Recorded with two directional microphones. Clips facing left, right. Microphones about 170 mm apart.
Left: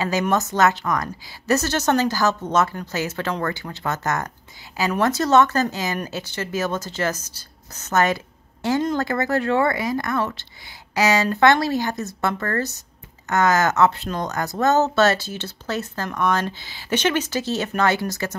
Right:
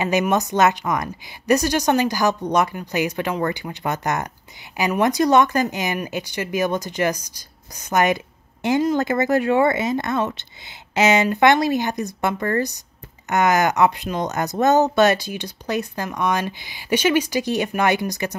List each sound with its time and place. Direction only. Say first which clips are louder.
0.0 s speech: right 2 dB; 20° right (ahead or behind)